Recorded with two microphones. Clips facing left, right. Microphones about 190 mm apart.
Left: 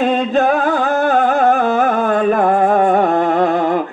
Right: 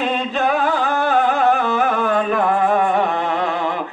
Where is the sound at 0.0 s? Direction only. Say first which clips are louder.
Left 6 dB; 45° left (ahead or behind).